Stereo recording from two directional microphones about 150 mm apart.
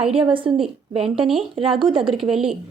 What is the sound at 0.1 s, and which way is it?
Speech, 35° right (ahead or behind).